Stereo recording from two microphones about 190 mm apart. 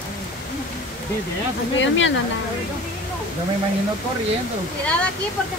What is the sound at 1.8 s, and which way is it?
Speech, 75° left (ahead or behind).